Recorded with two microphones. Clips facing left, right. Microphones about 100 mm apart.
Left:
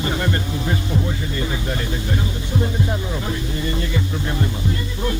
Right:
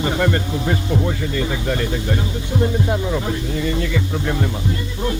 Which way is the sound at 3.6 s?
70° right (ahead or behind).